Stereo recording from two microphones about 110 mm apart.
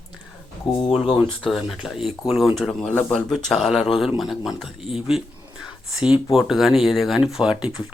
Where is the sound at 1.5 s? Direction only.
5° right (ahead or behind).